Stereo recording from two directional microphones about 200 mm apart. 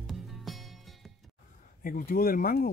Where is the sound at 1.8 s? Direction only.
45° left (ahead or behind).